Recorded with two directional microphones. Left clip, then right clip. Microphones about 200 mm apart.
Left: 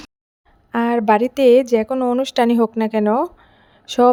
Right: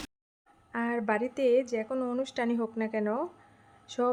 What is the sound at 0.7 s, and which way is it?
A woman's voice, 45° left (ahead or behind).